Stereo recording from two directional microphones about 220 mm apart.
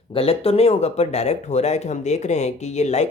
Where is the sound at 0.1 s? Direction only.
25° left (ahead or behind).